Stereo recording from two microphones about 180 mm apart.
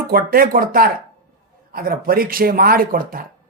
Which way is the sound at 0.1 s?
55° right (ahead or behind).